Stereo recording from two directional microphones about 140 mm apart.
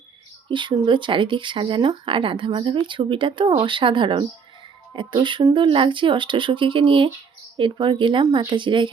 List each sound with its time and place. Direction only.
0.4 s speech: 35° right (ahead or behind)